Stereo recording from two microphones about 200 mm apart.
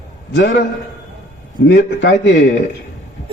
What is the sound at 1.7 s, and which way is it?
Speech, 60° left (ahead or behind).